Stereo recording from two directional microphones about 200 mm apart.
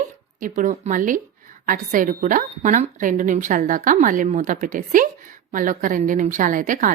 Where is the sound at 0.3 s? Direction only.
40° right (ahead or behind).